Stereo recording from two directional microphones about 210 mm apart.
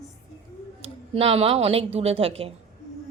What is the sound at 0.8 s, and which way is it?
A woman's voice, 25° right (ahead or behind).